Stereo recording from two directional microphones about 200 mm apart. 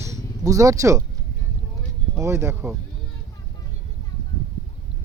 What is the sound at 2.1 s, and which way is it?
Speech, 10° right (ahead or behind).